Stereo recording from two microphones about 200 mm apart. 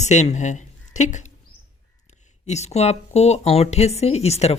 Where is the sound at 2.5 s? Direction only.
35° left (ahead or behind).